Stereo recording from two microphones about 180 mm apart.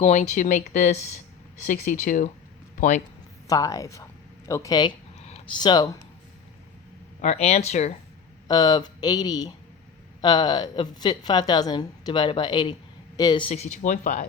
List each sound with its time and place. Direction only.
0.0 s speech: 40° left (ahead or behind)
3.4 s a woman's voice: 20° left (ahead or behind)
7.2 s speech: 35° left (ahead or behind)
8.4 s a woman's voice: 20° left (ahead or behind); by 14.3 s 45° left (ahead or behind)